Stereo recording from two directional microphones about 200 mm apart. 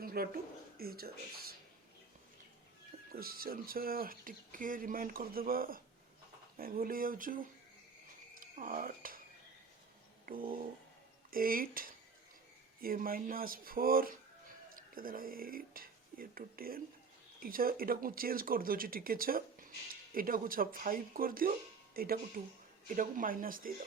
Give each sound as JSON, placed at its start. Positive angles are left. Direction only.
{"t": 0.0, "sound": "a sound", "side_deg": -45}
{"t": 0.8, "sound": "speech", "side_deg": -50}
{"t": 3.1, "sound": "speech", "side_deg": -50}
{"t": 10.2, "sound": "speech", "side_deg": -45}